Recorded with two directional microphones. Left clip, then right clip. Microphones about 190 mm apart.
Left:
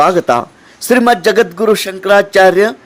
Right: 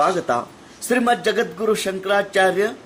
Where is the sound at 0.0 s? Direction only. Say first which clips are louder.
Left 9 dB; 50° left (ahead or behind).